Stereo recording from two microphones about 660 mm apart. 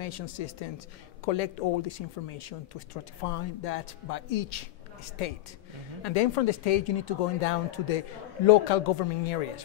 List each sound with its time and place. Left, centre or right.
0.0 s speech: left
6.0 s speech: left